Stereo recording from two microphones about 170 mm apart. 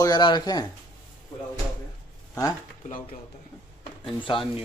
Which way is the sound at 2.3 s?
20° left (ahead or behind).